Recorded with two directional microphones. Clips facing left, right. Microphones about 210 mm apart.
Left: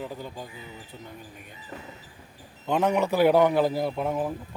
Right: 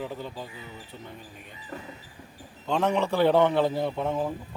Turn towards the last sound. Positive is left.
turn(degrees=5)  # may be behind; listen again after turning